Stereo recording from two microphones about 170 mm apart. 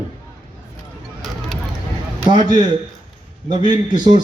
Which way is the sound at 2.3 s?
25° right (ahead or behind).